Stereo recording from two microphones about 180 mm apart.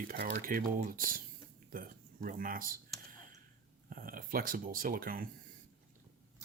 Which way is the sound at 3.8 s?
50° right (ahead or behind).